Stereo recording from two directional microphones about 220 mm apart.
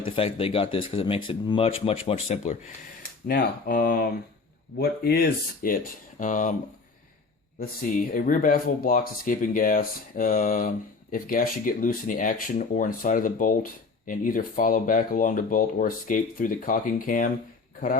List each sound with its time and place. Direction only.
0.0 s speech: 25° left (ahead or behind)
3.2 s speech: 40° left (ahead or behind)
7.6 s speech: 35° left (ahead or behind)